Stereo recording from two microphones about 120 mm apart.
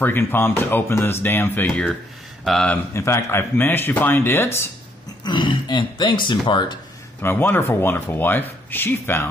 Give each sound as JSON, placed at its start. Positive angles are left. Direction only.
{"t": 0.0, "sound": "speech", "side_deg": 20}
{"t": 1.7, "sound": "speech", "side_deg": 0}
{"t": 2.9, "sound": "speech", "side_deg": 25}
{"t": 5.2, "sound": "speech", "side_deg": 40}
{"t": 7.2, "sound": "speech", "side_deg": 15}